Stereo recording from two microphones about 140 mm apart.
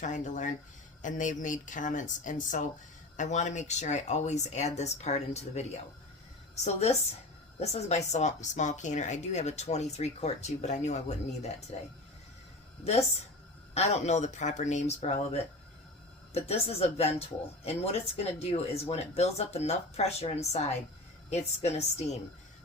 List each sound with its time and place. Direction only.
0.0 s speech: 60° left (ahead or behind)
7.6 s speech: 50° left (ahead or behind)
13.7 s speech: 50° left (ahead or behind)